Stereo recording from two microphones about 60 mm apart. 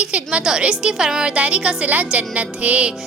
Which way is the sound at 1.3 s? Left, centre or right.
Right.